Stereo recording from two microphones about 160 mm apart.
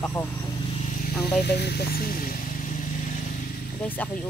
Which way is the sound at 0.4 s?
40° left (ahead or behind).